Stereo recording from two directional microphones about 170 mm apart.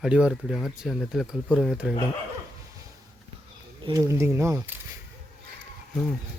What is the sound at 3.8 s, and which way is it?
Speech, 20° right (ahead or behind).